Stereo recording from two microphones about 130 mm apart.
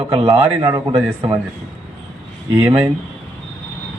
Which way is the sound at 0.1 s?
40° right (ahead or behind).